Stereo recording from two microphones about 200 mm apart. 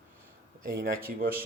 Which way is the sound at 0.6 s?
45° right (ahead or behind).